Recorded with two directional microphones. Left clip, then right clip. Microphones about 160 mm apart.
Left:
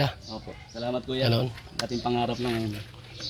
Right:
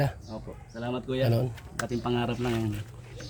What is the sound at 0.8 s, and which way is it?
Speech, 5° left (ahead or behind).